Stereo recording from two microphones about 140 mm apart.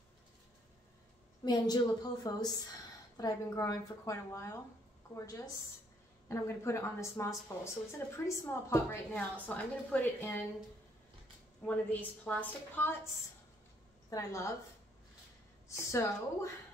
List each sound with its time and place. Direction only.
1.4 s a woman's voice: 30° left (ahead or behind); by 10.4 s 15° left (ahead or behind)
11.6 s a woman's voice: 10° left (ahead or behind)
14.1 s a woman's voice: 25° left (ahead or behind)
15.7 s a woman's voice: 20° left (ahead or behind)